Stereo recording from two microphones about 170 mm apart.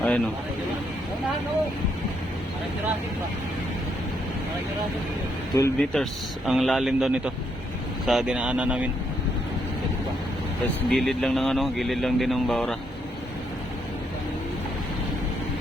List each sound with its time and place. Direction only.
0.0 s speech: 5° left (ahead or behind)
5.7 s speech: 5° left (ahead or behind)
10.8 s speech: centre (ahead or behind)